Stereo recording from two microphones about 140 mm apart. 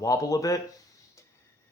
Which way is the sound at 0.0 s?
25° left (ahead or behind).